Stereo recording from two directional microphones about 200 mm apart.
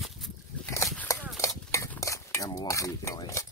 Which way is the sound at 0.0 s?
Centre (ahead or behind).